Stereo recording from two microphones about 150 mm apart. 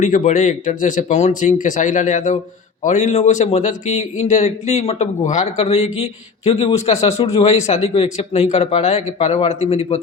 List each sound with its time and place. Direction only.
0.0 s a man's voice: 55° left (ahead or behind)